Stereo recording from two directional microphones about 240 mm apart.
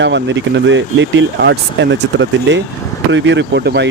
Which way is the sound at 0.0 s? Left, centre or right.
Right.